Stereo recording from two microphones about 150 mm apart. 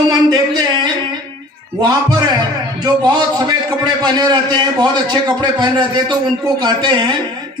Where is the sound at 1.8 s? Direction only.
25° right (ahead or behind).